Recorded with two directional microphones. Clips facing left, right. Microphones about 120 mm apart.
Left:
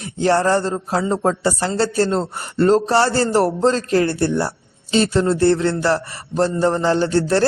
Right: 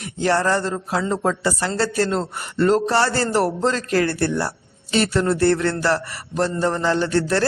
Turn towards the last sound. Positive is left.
turn(degrees=30)  # may be behind; listen again after turning